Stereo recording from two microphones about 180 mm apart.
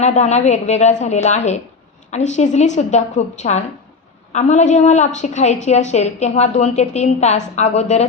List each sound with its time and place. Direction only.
0.0 s a woman's voice: 40° left (ahead or behind)